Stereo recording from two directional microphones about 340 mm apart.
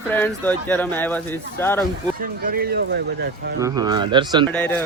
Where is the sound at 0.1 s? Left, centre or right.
Centre.